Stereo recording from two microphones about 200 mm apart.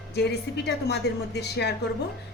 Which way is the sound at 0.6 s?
55° left (ahead or behind).